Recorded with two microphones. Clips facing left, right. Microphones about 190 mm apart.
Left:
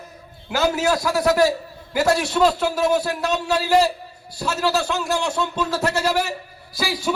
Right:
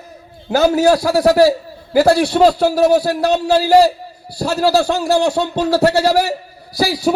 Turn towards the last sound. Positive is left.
turn(degrees=-40)  # may be behind; listen again after turning